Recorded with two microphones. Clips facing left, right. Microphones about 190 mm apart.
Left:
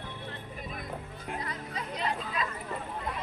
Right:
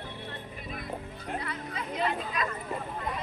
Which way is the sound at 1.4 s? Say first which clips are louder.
Right 1 dB; 35° left (ahead or behind).